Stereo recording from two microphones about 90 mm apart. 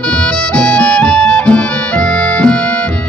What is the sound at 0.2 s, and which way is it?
Music, 10° left (ahead or behind).